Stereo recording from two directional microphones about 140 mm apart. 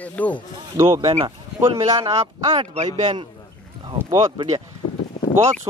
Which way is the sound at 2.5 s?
45° right (ahead or behind).